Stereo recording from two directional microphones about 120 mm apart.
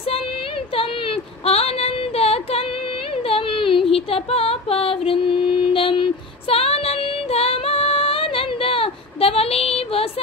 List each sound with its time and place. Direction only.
0.7 s child singing: 55° left (ahead or behind)
3.3 s female singing: 50° left (ahead or behind)